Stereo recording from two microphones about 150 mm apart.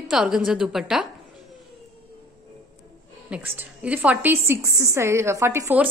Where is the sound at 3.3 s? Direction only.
10° right (ahead or behind).